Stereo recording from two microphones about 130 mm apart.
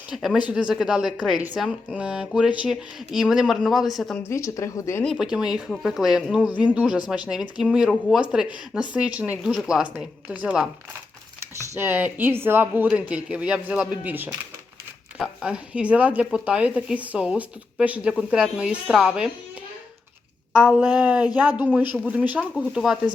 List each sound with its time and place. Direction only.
0.1 s a woman's voice: centre (ahead or behind)
4.2 s speech: 20° left (ahead or behind)
5.1 s a woman's voice: 5° right (ahead or behind)
11.7 s speech: 20° right (ahead or behind); by 19.3 s centre (ahead or behind)
20.5 s a woman's voice: 5° right (ahead or behind)